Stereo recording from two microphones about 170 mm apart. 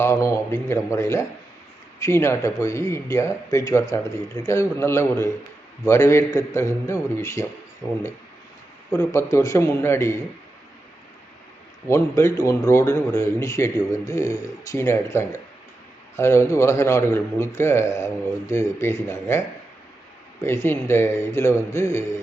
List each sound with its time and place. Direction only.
0.0 s speech: 15° left (ahead or behind)
11.9 s speech: 15° left (ahead or behind)
20.4 s speech: 15° left (ahead or behind)